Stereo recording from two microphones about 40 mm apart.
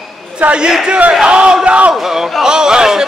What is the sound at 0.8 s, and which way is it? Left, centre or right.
Battle cry, right.